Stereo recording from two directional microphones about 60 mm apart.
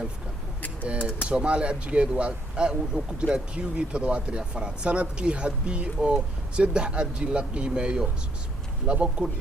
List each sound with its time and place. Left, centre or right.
0.9 s speech: centre